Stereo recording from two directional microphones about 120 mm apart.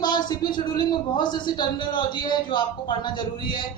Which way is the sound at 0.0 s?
35° left (ahead or behind).